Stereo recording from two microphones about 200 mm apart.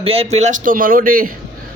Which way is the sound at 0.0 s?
30° right (ahead or behind).